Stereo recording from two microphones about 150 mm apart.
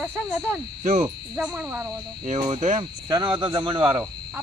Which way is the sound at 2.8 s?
25° right (ahead or behind).